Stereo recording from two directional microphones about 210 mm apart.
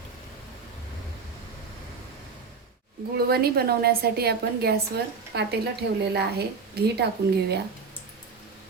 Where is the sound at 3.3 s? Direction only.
50° right (ahead or behind).